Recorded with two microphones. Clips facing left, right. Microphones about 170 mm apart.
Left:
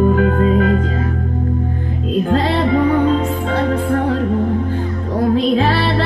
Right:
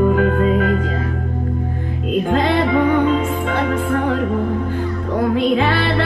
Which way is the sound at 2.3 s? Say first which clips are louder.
Even; 40° left (ahead or behind).